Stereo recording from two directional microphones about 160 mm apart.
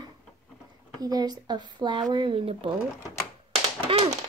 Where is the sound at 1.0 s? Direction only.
25° right (ahead or behind).